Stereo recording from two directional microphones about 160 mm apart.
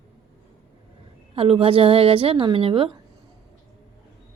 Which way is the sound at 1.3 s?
35° right (ahead or behind).